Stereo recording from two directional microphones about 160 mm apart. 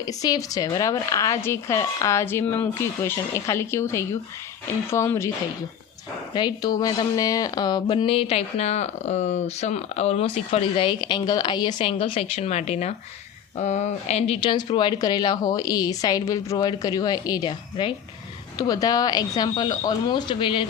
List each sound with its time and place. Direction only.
0.0 s speech: 25° left (ahead or behind)
6.3 s speech: 25° left (ahead or behind); by 14.3 s 45° left (ahead or behind)
14.4 s speech: 30° left (ahead or behind)